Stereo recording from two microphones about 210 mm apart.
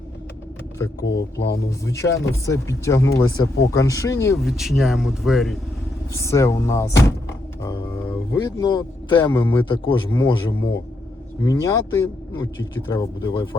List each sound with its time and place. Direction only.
1.0 s speech: 55° left (ahead or behind)
1.5 s speech: 15° left (ahead or behind)
4.4 s speech: centre (ahead or behind)
6.1 s a man's voice: 15° left (ahead or behind)